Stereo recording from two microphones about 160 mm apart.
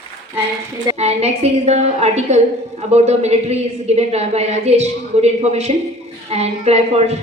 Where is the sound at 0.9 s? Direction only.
40° right (ahead or behind).